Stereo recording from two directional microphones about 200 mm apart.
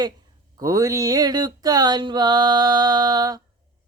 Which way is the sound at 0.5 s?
15° right (ahead or behind).